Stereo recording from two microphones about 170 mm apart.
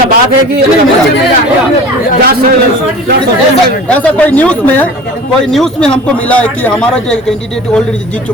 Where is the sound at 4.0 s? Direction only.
10° left (ahead or behind).